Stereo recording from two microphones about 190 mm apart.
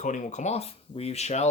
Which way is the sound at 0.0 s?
40° left (ahead or behind).